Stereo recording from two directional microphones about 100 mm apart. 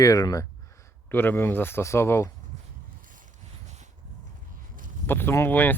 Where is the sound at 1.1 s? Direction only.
20° left (ahead or behind).